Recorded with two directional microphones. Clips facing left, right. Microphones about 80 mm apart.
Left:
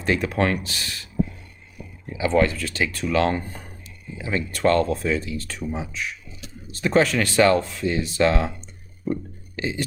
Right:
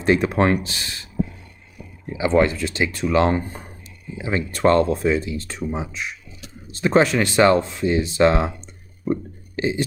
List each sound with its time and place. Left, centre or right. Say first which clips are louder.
0.0 s speech: right 4 dB; right
2.1 s speech: right 2 dB; right